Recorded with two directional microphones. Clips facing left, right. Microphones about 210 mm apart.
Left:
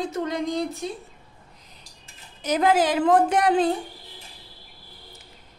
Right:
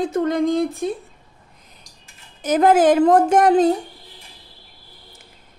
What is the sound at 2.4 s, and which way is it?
A woman's voice, 50° right (ahead or behind).